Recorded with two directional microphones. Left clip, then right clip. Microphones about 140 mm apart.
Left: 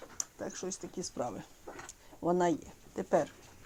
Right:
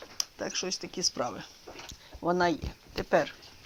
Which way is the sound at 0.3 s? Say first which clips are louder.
Right 6 dB; 40° right (ahead or behind).